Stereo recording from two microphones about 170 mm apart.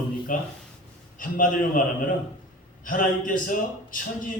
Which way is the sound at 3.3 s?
50° left (ahead or behind).